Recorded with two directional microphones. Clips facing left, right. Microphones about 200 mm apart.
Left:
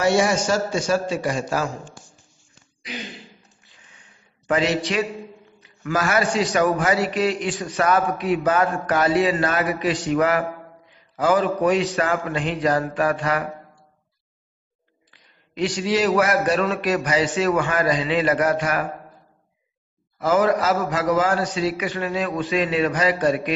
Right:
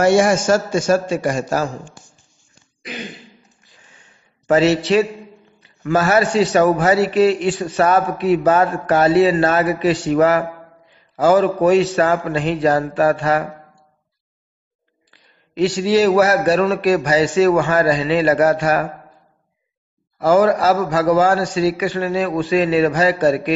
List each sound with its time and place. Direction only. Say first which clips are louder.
0.0 s a man's voice: right 5 dB; 50° right (ahead or behind)
4.5 s a man's voice: right 7 dB; 35° right (ahead or behind)
15.0 s a man's voice: right 3 dB; 30° right (ahead or behind)
20.2 s a man's voice: right 5 dB; 35° right (ahead or behind)